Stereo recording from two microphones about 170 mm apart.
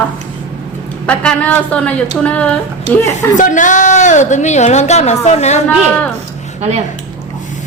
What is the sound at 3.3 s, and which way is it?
A woman's voice, 50° left (ahead or behind).